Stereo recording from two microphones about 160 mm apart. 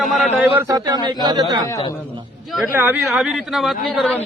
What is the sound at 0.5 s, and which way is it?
Speech, 20° right (ahead or behind).